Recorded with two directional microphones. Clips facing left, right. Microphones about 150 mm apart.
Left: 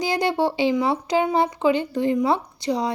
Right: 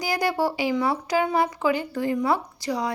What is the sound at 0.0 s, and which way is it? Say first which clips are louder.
A child's voice: left 3 dB; 25° left (ahead or behind).